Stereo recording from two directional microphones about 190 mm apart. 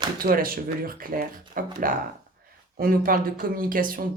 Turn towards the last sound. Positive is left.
turn(degrees=-45)  # may be behind; listen again after turning